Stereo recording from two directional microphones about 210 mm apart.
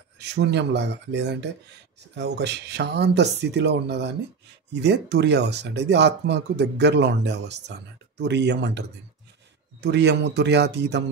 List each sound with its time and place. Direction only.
0.2 s speech: 55° right (ahead or behind)